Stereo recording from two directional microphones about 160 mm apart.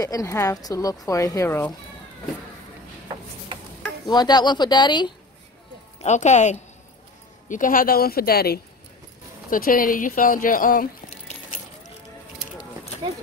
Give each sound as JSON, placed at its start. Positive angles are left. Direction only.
{"t": 0.0, "sound": "speech", "side_deg": 20}
{"t": 4.0, "sound": "speech", "side_deg": 25}
{"t": 5.9, "sound": "speech", "side_deg": 45}
{"t": 9.5, "sound": "speech", "side_deg": 60}